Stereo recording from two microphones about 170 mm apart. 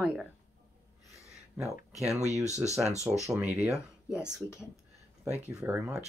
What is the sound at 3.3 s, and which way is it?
Speech, 10° right (ahead or behind).